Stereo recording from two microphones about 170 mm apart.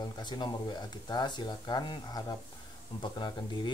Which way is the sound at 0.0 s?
25° left (ahead or behind).